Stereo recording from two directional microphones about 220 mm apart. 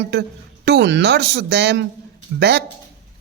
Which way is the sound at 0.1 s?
50° right (ahead or behind).